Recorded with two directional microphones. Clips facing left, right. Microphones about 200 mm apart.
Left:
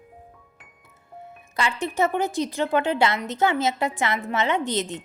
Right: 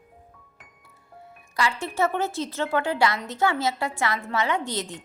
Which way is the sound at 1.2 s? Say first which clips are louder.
Even; 20° left (ahead or behind).